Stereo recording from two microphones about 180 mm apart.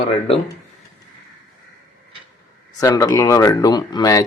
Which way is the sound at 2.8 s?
20° left (ahead or behind).